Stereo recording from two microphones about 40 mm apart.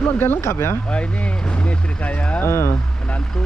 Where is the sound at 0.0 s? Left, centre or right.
Left.